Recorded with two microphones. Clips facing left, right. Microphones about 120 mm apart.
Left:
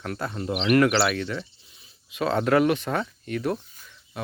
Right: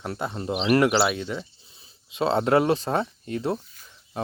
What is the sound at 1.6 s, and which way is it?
Speech, 30° right (ahead or behind).